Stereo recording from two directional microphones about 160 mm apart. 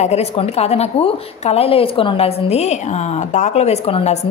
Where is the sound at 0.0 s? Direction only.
40° left (ahead or behind).